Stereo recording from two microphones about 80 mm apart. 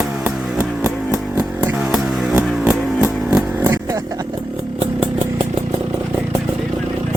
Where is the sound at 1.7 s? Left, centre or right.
Centre.